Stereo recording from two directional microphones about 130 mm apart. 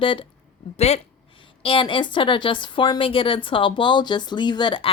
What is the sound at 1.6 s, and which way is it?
A woman's voice, 40° left (ahead or behind).